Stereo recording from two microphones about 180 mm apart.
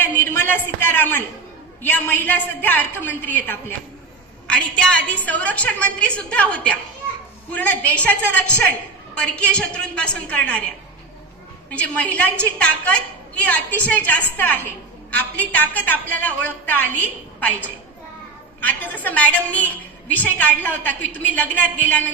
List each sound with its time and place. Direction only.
0.0 s a sound: 10° left (ahead or behind)
1.8 s a woman's voice: 10° left (ahead or behind)
11.7 s a woman's voice: 10° left (ahead or behind)
18.6 s a woman's voice: 10° left (ahead or behind)